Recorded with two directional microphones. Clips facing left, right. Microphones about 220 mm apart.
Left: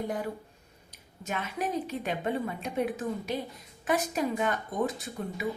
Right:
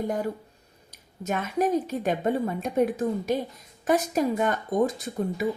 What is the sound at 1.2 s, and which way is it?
A woman's voice, 45° right (ahead or behind).